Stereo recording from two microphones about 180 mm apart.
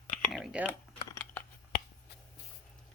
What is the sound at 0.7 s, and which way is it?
Typing, 15° left (ahead or behind).